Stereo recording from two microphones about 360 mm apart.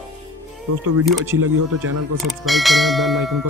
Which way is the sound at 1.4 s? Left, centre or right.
Right.